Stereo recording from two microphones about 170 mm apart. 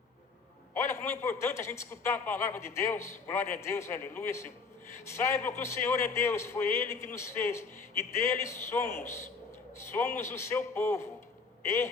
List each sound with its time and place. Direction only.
0.9 s a man's voice: 15° left (ahead or behind)
10.2 s a man's voice: 15° left (ahead or behind)